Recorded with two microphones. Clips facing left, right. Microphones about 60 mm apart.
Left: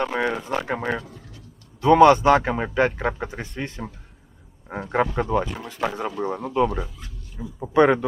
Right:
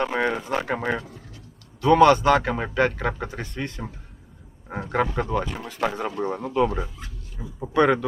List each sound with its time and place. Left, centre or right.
0.0 s speech: centre
1.8 s speech: centre
6.7 s speech: centre
7.7 s a man's voice: centre